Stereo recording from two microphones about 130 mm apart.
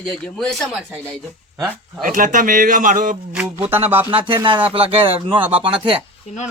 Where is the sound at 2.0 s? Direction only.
85° right.